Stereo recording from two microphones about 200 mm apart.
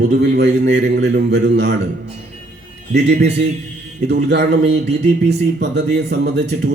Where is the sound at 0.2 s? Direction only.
60° right (ahead or behind).